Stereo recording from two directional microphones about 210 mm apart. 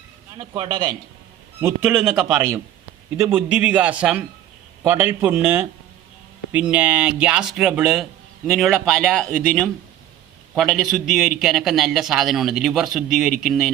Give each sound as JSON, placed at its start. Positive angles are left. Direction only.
{"t": 0.3, "sound": "a man's voice", "side_deg": -20}
{"t": 2.0, "sound": "a man's voice", "side_deg": -10}